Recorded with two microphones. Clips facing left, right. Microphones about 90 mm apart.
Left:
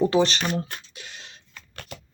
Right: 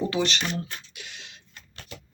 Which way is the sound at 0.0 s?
35° left (ahead or behind).